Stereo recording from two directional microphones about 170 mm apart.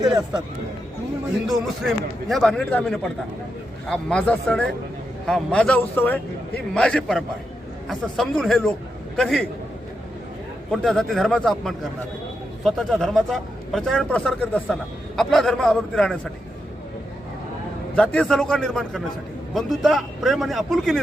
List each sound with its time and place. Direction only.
1.5 s a man's voice: centre (ahead or behind)
10.7 s a man's voice: centre (ahead or behind)
17.9 s a man's voice: 5° left (ahead or behind)